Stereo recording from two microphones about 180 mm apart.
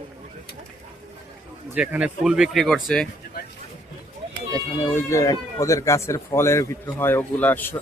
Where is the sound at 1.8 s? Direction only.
5° right (ahead or behind).